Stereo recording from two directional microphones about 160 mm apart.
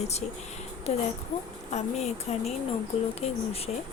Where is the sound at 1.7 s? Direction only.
45° left (ahead or behind).